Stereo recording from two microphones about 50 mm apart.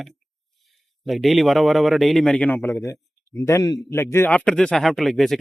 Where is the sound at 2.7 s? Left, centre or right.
Left.